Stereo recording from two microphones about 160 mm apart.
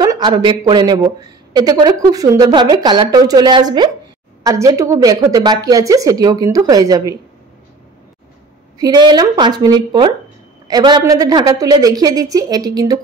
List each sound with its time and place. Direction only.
0.0 s speech: 25° right (ahead or behind)
8.7 s speech: 25° right (ahead or behind)